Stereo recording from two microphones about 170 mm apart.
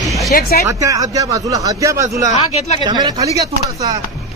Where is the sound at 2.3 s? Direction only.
40° left (ahead or behind).